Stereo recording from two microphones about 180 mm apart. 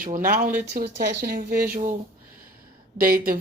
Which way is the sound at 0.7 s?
60° right (ahead or behind).